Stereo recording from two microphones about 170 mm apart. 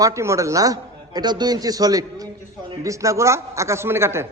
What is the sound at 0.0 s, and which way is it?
A man's voice, 15° right (ahead or behind).